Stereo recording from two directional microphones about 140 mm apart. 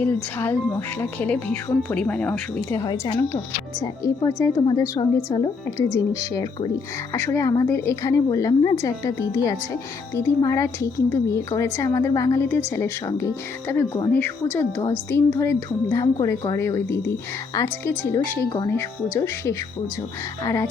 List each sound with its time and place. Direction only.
0.0 s speech: 15° left (ahead or behind)
2.8 s a woman's voice: 30° left (ahead or behind)